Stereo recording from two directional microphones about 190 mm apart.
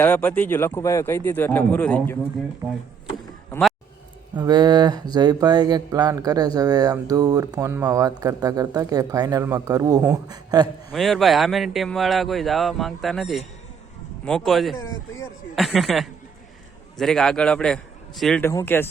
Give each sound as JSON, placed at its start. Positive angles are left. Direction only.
{"t": 0.0, "sound": "a man's voice", "side_deg": 10}
{"t": 4.4, "sound": "speech", "side_deg": -20}
{"t": 10.9, "sound": "speech", "side_deg": 0}
{"t": 18.4, "sound": "a man's voice", "side_deg": 10}